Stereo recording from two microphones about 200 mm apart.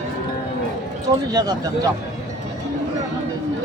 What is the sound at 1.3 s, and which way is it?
Speech, 20° right (ahead or behind).